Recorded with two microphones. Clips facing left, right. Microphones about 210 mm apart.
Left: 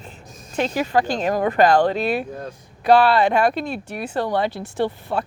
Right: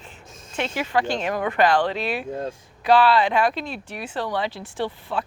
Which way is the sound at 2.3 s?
25° right (ahead or behind).